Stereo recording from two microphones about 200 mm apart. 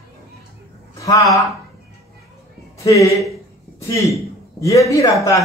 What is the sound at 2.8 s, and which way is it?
A man's voice, 15° left (ahead or behind).